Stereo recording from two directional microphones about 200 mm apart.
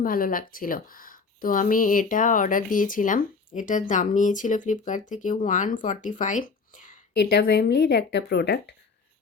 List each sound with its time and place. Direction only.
0.0 s speech: 45° left (ahead or behind)
7.1 s speech: 55° left (ahead or behind)